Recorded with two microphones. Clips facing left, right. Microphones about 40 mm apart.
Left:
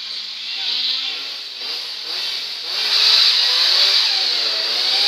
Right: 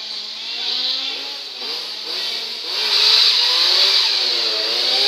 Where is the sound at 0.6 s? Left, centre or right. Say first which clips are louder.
Left 1 dB; centre.